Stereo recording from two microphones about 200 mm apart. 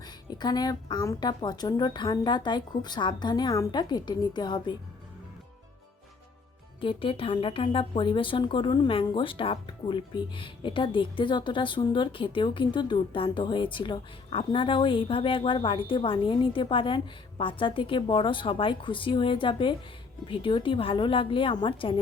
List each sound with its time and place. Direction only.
0.0 s a woman's voice: 20° left (ahead or behind)
6.7 s a woman's voice: 25° left (ahead or behind)